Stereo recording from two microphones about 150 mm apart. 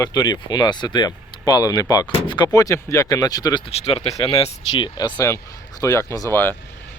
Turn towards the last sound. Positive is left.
turn(degrees=15)  # may be behind; listen again after turning